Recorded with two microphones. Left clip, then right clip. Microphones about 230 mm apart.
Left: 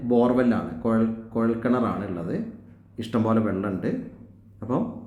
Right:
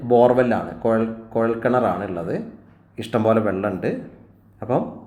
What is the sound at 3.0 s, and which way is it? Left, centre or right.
Speech, centre.